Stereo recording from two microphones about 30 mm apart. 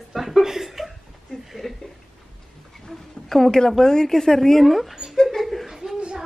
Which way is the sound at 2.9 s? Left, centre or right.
Centre.